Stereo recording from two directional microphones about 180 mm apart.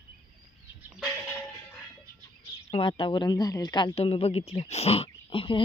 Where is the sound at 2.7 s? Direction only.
30° left (ahead or behind).